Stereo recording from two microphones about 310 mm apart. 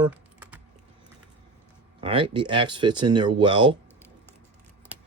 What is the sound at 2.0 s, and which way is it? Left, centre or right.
Speech, centre.